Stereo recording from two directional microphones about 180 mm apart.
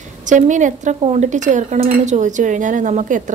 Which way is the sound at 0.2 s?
45° right (ahead or behind).